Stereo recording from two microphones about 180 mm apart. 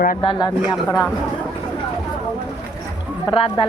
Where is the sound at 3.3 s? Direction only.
30° left (ahead or behind).